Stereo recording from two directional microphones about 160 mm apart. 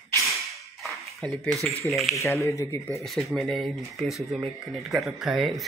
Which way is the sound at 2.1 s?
15° left (ahead or behind).